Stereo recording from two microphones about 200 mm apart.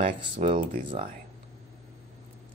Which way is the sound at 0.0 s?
30° right (ahead or behind).